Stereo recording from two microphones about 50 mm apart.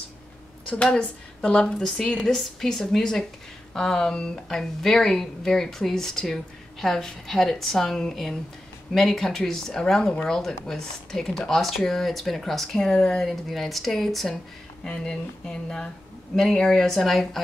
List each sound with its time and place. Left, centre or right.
0.8 s a woman's voice: centre
2.3 s a woman's voice: centre
13.2 s speech: centre
14.9 s a woman's voice: centre